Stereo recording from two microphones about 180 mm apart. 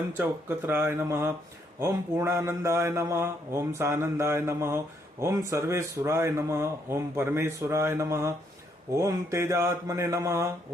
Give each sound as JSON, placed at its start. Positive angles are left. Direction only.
{"t": 0.2, "sound": "speech", "side_deg": -10}